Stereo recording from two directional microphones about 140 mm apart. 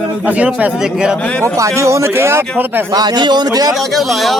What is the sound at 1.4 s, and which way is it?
Speech, 20° right (ahead or behind).